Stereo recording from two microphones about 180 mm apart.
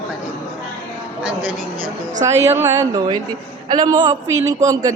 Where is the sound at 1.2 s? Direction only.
5° right (ahead or behind).